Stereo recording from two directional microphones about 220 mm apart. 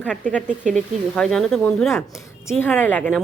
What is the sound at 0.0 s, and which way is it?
A woman's voice, 5° left (ahead or behind).